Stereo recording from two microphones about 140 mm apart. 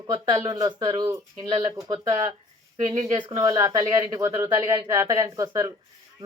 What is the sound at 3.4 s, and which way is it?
Speech, 25° right (ahead or behind).